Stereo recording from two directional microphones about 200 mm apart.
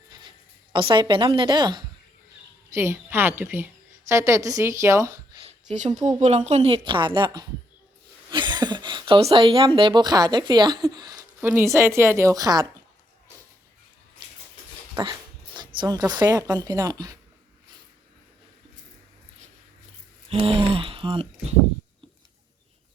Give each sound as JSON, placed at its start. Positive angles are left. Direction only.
{"t": 0.1, "sound": "a sound", "side_deg": -25}
{"t": 2.6, "sound": "a woman's voice", "side_deg": -15}
{"t": 5.5, "sound": "a sound", "side_deg": -35}
{"t": 5.9, "sound": "a woman's voice", "side_deg": -20}
{"t": 6.1, "sound": "a woman's voice", "side_deg": -35}
{"t": 11.3, "sound": "speech", "side_deg": -5}
{"t": 11.6, "sound": "a woman's voice", "side_deg": -15}
{"t": 15.5, "sound": "a sound", "side_deg": -25}
{"t": 16.1, "sound": "a woman's voice", "side_deg": -20}
{"t": 20.3, "sound": "speech", "side_deg": -25}